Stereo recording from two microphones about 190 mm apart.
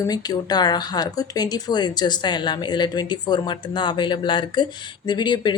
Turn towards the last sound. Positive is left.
turn(degrees=25)  # may be behind; listen again after turning